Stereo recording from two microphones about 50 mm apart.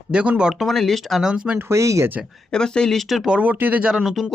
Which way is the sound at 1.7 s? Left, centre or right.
Right.